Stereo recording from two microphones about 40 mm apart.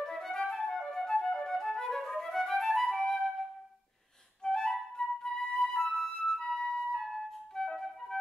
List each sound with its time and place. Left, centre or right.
0.0 s flute: centre
4.4 s flute: centre